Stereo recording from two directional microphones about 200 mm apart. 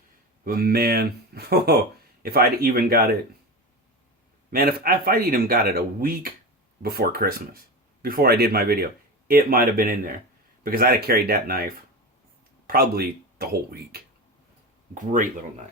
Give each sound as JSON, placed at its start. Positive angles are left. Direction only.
{"t": 0.4, "sound": "speech", "side_deg": -45}
{"t": 4.5, "sound": "speech", "side_deg": -50}
{"t": 14.9, "sound": "speech", "side_deg": -40}